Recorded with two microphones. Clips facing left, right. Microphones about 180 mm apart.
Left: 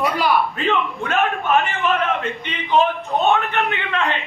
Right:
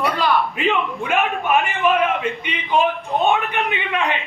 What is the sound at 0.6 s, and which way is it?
A man's voice, 15° right (ahead or behind).